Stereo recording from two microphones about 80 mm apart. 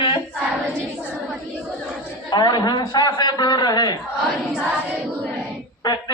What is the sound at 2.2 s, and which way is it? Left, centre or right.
A man's voice, left.